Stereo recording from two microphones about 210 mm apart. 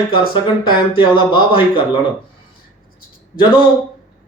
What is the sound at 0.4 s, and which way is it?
Speech, 25° left (ahead or behind).